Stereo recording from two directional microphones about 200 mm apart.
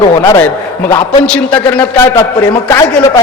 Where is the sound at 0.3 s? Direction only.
10° left (ahead or behind).